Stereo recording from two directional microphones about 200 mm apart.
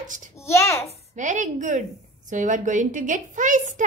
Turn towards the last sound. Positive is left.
turn(degrees=-40)  # may be behind; listen again after turning